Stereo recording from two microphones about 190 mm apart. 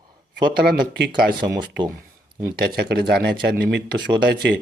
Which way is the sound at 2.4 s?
55° right (ahead or behind).